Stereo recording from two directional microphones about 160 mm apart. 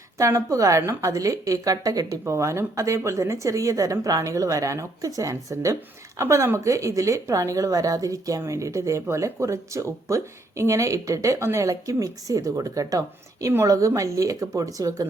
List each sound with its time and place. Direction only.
0.2 s speech: 20° right (ahead or behind)